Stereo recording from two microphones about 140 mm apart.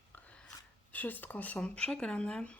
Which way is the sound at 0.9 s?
10° left (ahead or behind).